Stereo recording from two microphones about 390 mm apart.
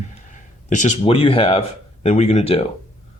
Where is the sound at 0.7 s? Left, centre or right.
Centre.